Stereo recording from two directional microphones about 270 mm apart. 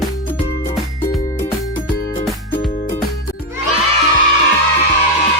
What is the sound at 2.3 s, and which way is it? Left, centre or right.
Music, centre.